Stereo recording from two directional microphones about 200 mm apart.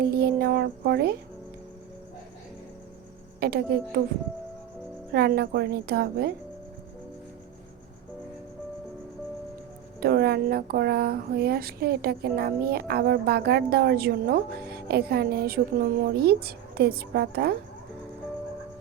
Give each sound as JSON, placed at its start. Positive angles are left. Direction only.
{"t": 0.0, "sound": "speech", "side_deg": -50}
{"t": 3.4, "sound": "speech", "side_deg": -50}
{"t": 5.1, "sound": "speech", "side_deg": -50}
{"t": 10.0, "sound": "speech", "side_deg": -50}